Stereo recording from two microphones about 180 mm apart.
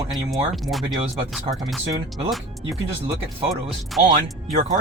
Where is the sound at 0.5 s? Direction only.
Centre (ahead or behind).